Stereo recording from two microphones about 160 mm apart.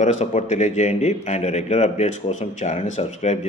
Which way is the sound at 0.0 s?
45° left (ahead or behind).